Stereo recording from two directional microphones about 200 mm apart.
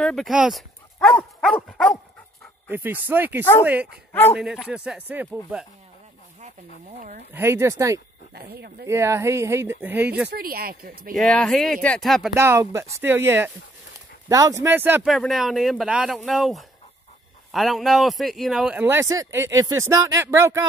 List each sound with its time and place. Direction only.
0.0 s speech: centre (ahead or behind)
2.7 s a man's voice: 10° right (ahead or behind)
7.0 s speech: 40° right (ahead or behind)
7.3 s a man's voice: 10° right (ahead or behind)
8.4 s speech: 50° right (ahead or behind)
8.8 s a man's voice: 15° right (ahead or behind)
10.3 s speech: 50° right (ahead or behind)
11.1 s speech: 5° left (ahead or behind)
12.4 s a man's voice: 15° right (ahead or behind)